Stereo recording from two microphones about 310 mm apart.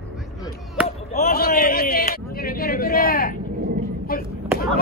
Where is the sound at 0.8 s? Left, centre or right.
Left.